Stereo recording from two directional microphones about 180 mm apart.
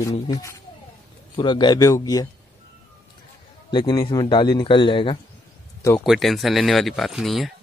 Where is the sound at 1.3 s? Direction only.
25° left (ahead or behind).